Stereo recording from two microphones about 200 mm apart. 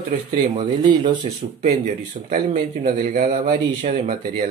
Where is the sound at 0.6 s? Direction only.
25° right (ahead or behind).